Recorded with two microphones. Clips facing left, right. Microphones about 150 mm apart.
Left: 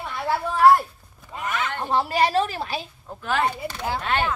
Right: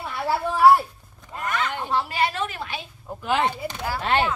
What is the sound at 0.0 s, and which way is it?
Speech, 5° right (ahead or behind).